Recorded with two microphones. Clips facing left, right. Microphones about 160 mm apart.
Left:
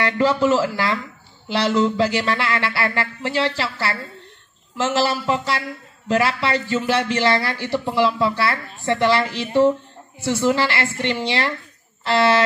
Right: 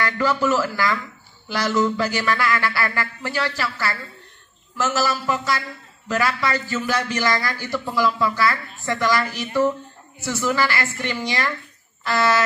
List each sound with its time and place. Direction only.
0.0 s a man's voice: 25° left (ahead or behind)